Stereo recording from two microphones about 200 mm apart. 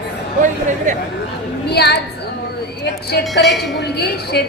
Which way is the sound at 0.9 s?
35° right (ahead or behind).